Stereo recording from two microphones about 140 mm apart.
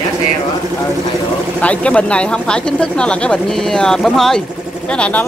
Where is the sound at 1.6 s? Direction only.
10° left (ahead or behind).